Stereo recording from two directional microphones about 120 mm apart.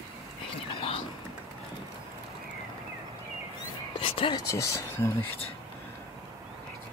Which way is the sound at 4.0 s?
45° left (ahead or behind).